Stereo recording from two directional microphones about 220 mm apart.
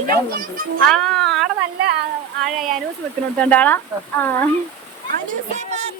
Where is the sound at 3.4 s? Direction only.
5° left (ahead or behind).